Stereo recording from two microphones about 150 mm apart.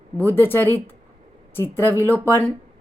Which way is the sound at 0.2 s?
15° left (ahead or behind).